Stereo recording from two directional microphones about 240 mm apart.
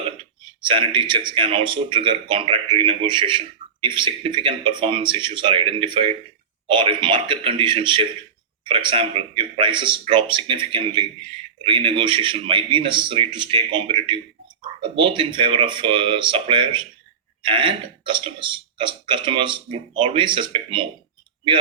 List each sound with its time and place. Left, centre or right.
0.7 s speech: right